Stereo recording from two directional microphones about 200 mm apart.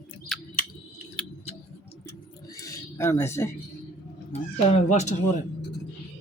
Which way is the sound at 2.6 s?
15° left (ahead or behind).